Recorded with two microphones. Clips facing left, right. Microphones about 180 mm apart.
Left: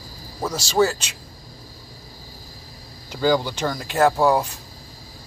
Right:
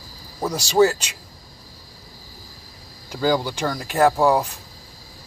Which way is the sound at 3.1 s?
10° right (ahead or behind).